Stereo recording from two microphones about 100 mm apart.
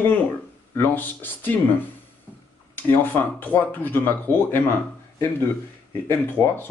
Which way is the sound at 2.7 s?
20° left (ahead or behind).